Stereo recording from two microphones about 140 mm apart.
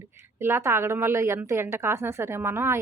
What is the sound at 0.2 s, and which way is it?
A woman's voice, 15° right (ahead or behind).